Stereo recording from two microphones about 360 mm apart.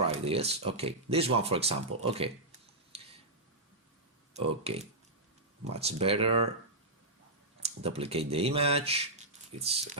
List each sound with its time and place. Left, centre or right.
0.1 s speech: centre
2.0 s a sound: centre
4.4 s speech: centre
7.6 s speech: centre